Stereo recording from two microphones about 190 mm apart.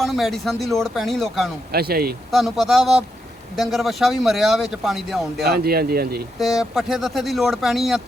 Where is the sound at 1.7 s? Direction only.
55° right (ahead or behind).